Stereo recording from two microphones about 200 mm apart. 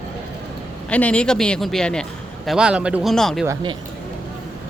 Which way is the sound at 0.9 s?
5° left (ahead or behind).